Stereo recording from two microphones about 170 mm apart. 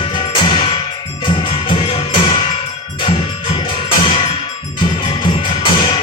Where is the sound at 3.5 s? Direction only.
25° left (ahead or behind).